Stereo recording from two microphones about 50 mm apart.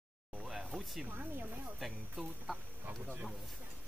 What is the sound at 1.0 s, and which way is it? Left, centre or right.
Speech, right.